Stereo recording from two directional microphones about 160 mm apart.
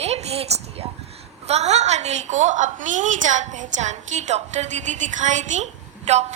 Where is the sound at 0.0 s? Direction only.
40° right (ahead or behind).